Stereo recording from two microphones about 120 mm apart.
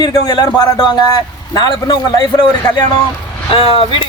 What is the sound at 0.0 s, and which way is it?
A man's voice, 35° left (ahead or behind).